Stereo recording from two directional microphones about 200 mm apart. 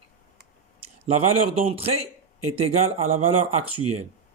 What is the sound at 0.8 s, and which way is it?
A man's voice, 30° right (ahead or behind).